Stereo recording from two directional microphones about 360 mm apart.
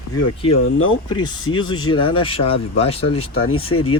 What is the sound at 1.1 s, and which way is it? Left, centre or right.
Speech, centre.